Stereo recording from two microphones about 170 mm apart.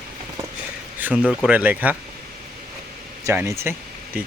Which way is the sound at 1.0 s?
10° right (ahead or behind).